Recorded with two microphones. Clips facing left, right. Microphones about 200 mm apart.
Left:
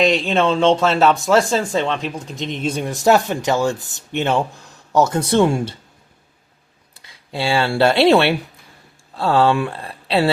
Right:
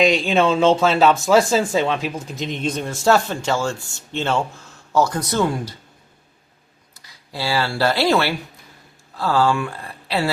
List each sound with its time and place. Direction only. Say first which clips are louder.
0.0 s speech: even; centre (ahead or behind); by 5.7 s 25° left (ahead or behind)
7.3 s speech: left 4 dB; 25° left (ahead or behind)